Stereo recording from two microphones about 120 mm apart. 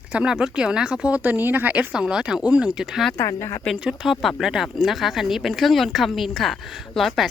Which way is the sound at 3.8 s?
5° right (ahead or behind).